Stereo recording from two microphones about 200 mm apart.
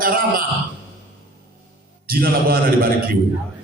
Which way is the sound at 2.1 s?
50° right (ahead or behind).